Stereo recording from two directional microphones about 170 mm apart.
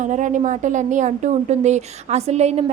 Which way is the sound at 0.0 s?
45° right (ahead or behind).